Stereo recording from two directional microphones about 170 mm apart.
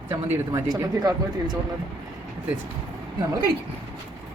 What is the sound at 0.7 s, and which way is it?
Speech, 20° right (ahead or behind).